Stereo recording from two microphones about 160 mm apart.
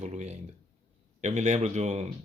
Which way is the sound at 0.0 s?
45° right (ahead or behind).